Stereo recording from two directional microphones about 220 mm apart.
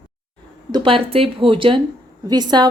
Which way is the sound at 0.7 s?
25° right (ahead or behind).